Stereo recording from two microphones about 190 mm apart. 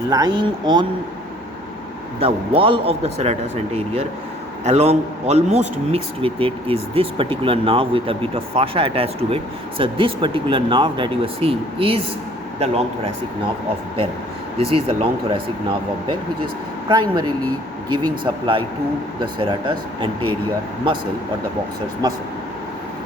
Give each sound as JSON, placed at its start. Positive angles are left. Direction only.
{"t": 0.1, "sound": "a man's voice", "side_deg": -20}
{"t": 2.2, "sound": "a man's voice", "side_deg": -30}
{"t": 14.6, "sound": "a man's voice", "side_deg": -30}
{"t": 16.9, "sound": "a man's voice", "side_deg": -20}